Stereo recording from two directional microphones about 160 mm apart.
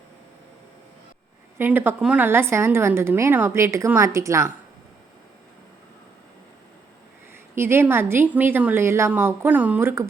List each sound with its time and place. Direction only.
1.5 s a woman's voice: 15° right (ahead or behind)
7.5 s a woman's voice: 15° right (ahead or behind)